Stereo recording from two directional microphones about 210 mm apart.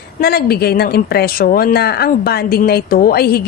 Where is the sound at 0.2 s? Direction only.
45° left (ahead or behind).